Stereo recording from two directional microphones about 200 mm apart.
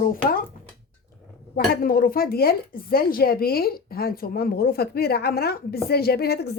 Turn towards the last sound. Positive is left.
turn(degrees=55)  # may be behind; listen again after turning